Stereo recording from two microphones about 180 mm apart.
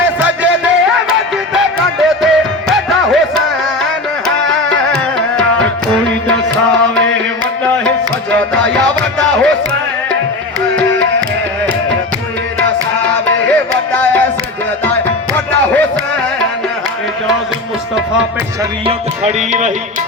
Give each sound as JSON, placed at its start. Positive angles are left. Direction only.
{"t": 0.2, "sound": "music", "side_deg": -10}
{"t": 4.4, "sound": "music", "side_deg": 5}
{"t": 7.9, "sound": "music", "side_deg": 5}
{"t": 12.5, "sound": "music", "side_deg": 10}
{"t": 19.5, "sound": "music", "side_deg": -45}